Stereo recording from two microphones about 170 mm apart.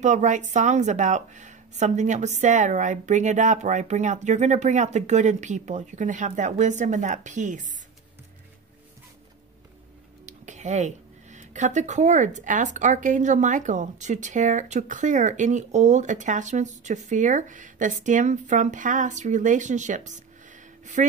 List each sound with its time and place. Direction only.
0.0 s speech: 45° right (ahead or behind)
10.2 s speech: 45° right (ahead or behind)